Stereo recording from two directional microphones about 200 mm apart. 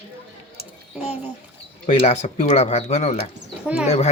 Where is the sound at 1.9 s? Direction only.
30° left (ahead or behind).